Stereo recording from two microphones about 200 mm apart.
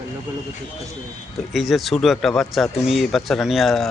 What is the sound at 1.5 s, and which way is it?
Speech, centre (ahead or behind).